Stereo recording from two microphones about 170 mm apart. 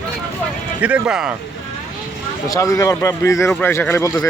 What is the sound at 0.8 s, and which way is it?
Speech, 10° right (ahead or behind).